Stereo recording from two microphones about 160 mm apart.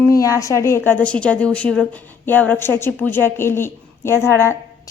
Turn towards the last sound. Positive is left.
turn(degrees=15)  # may be behind; listen again after turning